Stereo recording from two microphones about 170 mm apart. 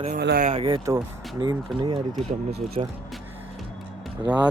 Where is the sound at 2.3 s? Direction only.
35° right (ahead or behind).